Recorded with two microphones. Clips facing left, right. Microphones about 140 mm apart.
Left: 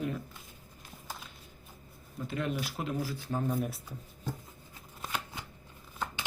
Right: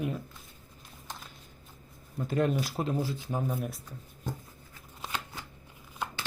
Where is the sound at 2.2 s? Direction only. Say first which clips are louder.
Right 6 dB; 40° right (ahead or behind); by 3.8 s centre (ahead or behind).